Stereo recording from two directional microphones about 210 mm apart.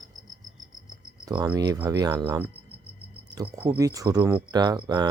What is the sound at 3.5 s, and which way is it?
Speech, 10° right (ahead or behind).